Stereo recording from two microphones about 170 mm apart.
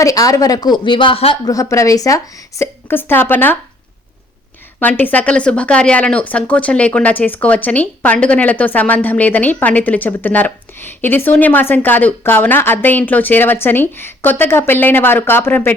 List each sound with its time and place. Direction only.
0.0 s speech: 20° left (ahead or behind)
1.5 s speech: 20° left (ahead or behind)
4.8 s speech: 10° left (ahead or behind)